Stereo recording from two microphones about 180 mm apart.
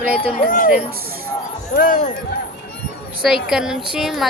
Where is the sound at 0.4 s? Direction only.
50° left (ahead or behind).